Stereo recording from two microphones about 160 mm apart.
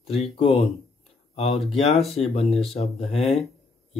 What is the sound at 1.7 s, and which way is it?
Speech, 40° left (ahead or behind).